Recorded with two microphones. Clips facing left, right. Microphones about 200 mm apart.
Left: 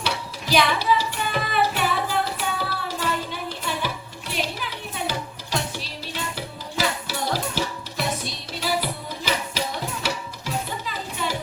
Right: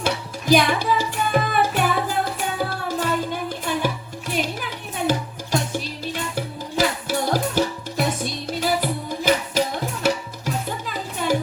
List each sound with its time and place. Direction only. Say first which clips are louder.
0.0 s music: right 4 dB; 50° right (ahead or behind)